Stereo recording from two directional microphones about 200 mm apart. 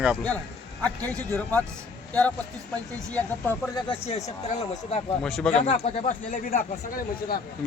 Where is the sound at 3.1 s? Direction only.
10° left (ahead or behind).